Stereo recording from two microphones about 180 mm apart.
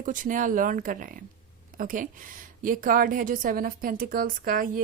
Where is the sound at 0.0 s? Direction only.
45° right (ahead or behind).